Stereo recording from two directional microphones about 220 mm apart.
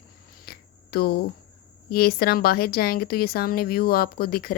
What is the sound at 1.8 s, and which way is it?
A woman's voice, 45° left (ahead or behind).